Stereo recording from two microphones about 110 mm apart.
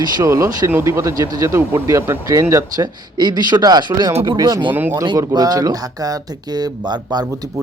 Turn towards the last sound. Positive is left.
turn(degrees=-40)  # may be behind; listen again after turning